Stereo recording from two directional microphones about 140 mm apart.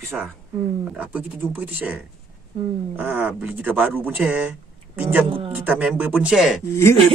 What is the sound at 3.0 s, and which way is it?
Speech, 10° right (ahead or behind).